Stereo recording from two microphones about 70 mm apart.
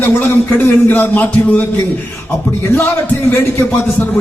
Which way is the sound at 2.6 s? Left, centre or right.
Left.